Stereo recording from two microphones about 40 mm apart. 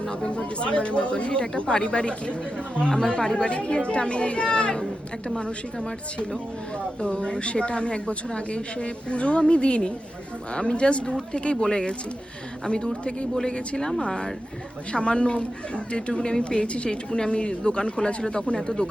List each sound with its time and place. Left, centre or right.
0.0 s a woman's voice: left